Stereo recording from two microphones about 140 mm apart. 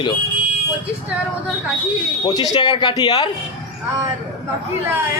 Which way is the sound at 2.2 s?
25° left (ahead or behind).